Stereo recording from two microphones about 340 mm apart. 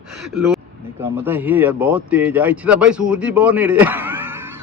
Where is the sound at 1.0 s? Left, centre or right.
Centre.